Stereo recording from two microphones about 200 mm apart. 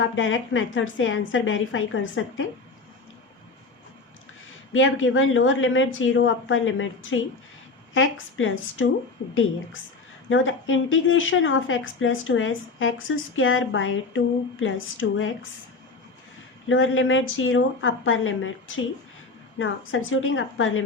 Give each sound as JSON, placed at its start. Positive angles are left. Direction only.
{"t": 0.0, "sound": "a woman's voice", "side_deg": 75}
{"t": 4.7, "sound": "a woman's voice", "side_deg": 75}
{"t": 10.2, "sound": "speech", "side_deg": 80}
{"t": 16.6, "sound": "a woman's voice", "side_deg": 80}